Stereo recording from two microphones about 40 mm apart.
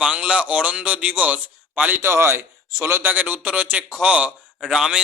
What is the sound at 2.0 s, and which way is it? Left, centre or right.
Speech, right.